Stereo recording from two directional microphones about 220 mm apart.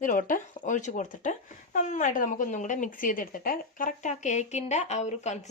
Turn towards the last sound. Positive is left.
turn(degrees=30)  # may be behind; listen again after turning